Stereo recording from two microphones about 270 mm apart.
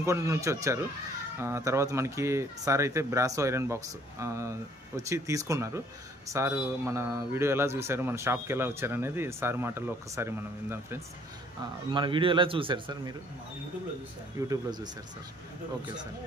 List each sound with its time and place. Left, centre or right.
0.0 s a man's voice: centre
14.5 s speech: centre